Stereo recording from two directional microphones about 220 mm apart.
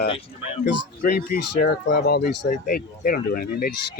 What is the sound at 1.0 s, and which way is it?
Speech, 40° left (ahead or behind).